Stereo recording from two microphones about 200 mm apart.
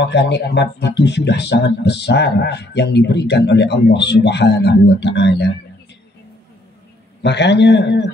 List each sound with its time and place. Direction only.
0.0 s speech: 60° left (ahead or behind)
7.2 s speech: 60° left (ahead or behind)